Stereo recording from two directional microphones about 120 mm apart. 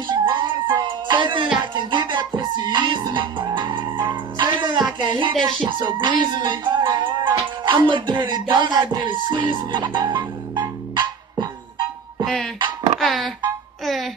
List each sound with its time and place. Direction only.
0.0 s music: 40° right (ahead or behind)
13.0 s speech: centre (ahead or behind)
13.8 s music: centre (ahead or behind)